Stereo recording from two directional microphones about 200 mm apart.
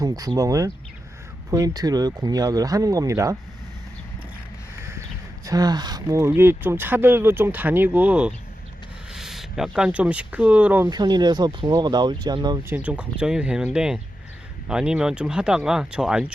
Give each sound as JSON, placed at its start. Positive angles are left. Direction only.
{"t": 0.0, "sound": "speech", "side_deg": -20}
{"t": 4.8, "sound": "a sound", "side_deg": -15}
{"t": 5.5, "sound": "speech", "side_deg": -20}
{"t": 10.8, "sound": "speech", "side_deg": -20}
{"t": 12.7, "sound": "speech", "side_deg": -5}